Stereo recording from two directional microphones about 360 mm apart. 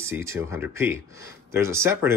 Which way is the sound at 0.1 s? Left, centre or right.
Centre.